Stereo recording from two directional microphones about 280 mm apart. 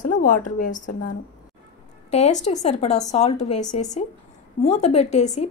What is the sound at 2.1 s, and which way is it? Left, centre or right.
A woman's voice, left.